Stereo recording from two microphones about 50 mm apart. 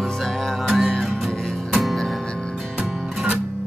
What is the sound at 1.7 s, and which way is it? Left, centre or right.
Music, centre.